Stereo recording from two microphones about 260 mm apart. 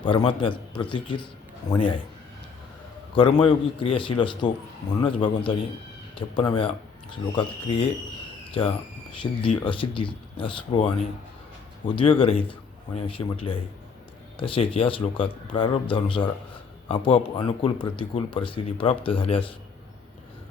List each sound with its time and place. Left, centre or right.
0.0 s speech: centre
3.2 s speech: centre
11.9 s speech: centre